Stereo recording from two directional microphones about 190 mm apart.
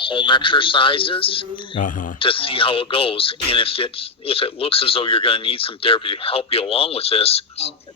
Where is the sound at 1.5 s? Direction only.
45° left (ahead or behind).